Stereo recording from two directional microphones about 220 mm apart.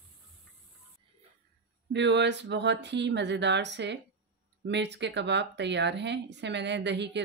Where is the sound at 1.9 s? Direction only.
55° right (ahead or behind).